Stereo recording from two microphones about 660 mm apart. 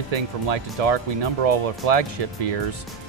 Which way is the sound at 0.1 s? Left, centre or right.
Right.